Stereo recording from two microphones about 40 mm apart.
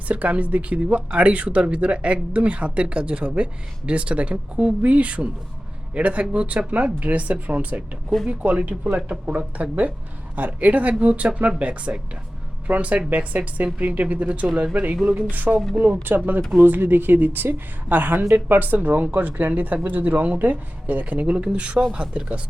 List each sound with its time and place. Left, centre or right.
0.1 s a woman's voice: right
21.3 s speech: right